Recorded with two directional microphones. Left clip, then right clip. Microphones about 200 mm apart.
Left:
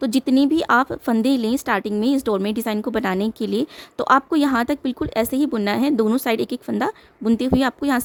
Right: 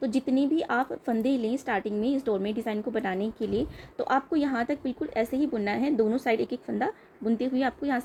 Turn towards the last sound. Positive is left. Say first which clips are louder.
# left 8 dB
turn(degrees=50)  # may be behind; listen again after turning